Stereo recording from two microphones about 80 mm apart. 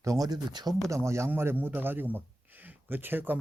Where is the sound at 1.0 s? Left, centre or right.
Right.